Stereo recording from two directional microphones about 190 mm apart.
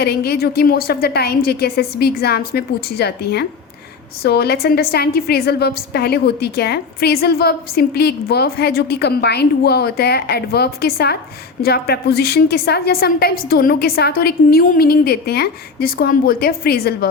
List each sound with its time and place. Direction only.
0.0 s a woman's voice: 55° left (ahead or behind)